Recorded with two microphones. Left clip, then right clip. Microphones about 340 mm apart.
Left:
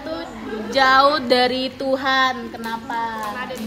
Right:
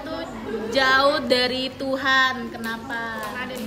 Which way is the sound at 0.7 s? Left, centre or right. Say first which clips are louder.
Left 4 dB; centre.